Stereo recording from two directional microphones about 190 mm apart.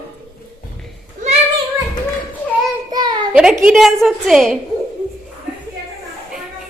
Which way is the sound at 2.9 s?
20° right (ahead or behind).